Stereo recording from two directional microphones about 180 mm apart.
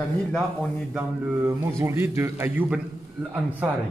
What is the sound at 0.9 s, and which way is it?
A man's voice, 15° right (ahead or behind).